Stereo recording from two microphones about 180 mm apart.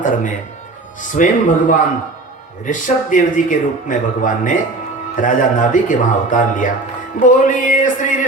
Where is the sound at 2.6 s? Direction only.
45° left (ahead or behind).